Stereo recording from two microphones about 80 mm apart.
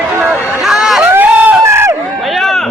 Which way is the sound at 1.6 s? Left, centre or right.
Right.